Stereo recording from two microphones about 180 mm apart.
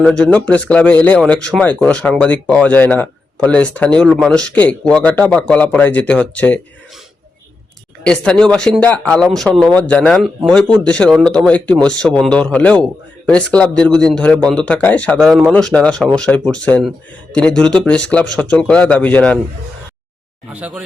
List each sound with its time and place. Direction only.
0.0 s speech: 5° left (ahead or behind)
8.0 s speech: 5° left (ahead or behind)
20.5 s speech: 10° right (ahead or behind)